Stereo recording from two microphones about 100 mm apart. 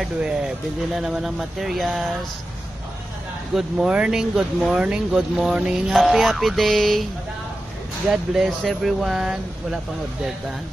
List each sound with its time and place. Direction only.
0.0 s speech: 5° right (ahead or behind)
3.5 s speech: 5° right (ahead or behind)
8.1 s speech: 5° right (ahead or behind)